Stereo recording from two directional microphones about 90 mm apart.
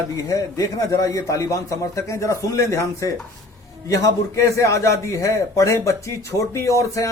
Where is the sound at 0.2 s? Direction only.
40° left (ahead or behind).